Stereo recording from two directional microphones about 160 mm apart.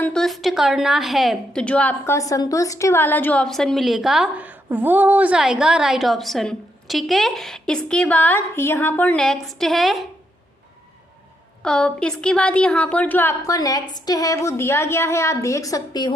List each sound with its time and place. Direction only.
0.0 s a woman's voice: 5° left (ahead or behind)
11.6 s a woman's voice: 5° left (ahead or behind); by 16.1 s 25° left (ahead or behind)